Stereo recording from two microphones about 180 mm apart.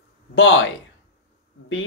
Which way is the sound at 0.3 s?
90° left.